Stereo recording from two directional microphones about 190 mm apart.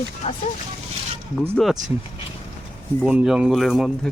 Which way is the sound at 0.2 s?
35° left (ahead or behind).